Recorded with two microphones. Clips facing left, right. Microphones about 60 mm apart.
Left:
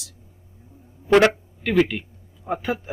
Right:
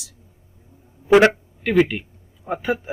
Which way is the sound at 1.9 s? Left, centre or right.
Centre.